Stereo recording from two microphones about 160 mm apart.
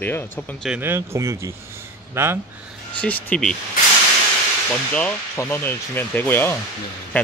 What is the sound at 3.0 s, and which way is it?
Speech, 10° left (ahead or behind).